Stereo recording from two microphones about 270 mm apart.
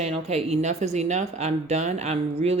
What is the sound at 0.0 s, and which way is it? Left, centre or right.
A woman's voice, right.